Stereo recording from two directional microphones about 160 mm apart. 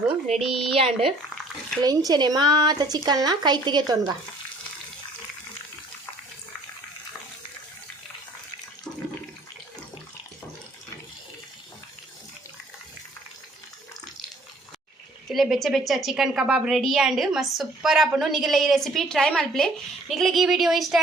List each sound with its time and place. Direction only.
0.3 s speech: 40° right (ahead or behind)
1.8 s speech: 25° right (ahead or behind)
15.3 s a woman's voice: centre (ahead or behind)